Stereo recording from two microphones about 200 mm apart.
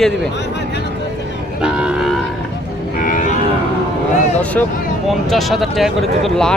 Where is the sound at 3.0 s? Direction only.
40° left (ahead or behind).